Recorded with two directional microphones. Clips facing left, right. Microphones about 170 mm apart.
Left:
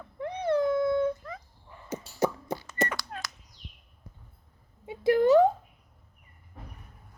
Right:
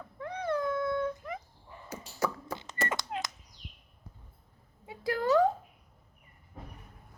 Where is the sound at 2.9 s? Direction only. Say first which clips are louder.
Right 3 dB; 20° right (ahead or behind).